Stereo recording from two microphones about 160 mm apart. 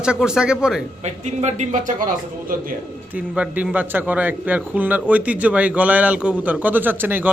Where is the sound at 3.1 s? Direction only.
10° right (ahead or behind).